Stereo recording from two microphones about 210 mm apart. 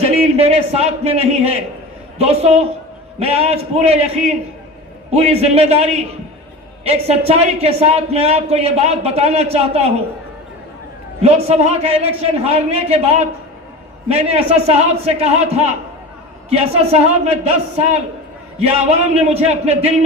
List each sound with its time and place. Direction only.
0.0 s a man's voice: 30° right (ahead or behind)
11.2 s a man's voice: 30° right (ahead or behind)